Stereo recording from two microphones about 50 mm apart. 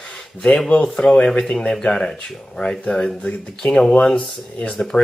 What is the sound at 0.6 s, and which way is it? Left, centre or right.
Speech, left.